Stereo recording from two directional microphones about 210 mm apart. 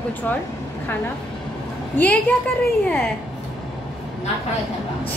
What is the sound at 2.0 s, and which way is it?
Speech, 10° left (ahead or behind).